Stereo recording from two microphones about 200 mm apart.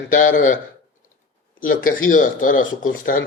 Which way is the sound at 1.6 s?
45° left (ahead or behind).